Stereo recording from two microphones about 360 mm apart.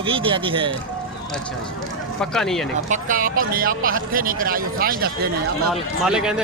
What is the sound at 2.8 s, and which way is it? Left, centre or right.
Speech, right.